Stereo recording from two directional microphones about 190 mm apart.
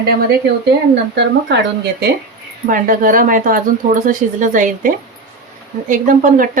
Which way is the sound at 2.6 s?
45° right (ahead or behind).